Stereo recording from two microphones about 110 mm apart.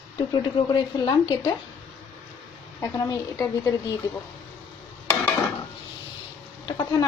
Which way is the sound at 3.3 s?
20° left (ahead or behind).